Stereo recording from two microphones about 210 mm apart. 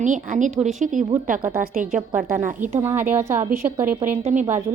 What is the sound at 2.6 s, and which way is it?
A woman's voice, 10° right (ahead or behind).